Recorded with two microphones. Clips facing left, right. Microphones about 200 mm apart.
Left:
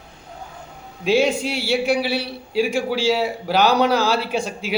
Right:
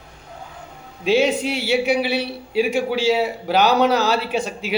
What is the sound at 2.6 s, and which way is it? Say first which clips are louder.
A man's voice: right 1 dB; 5° right (ahead or behind).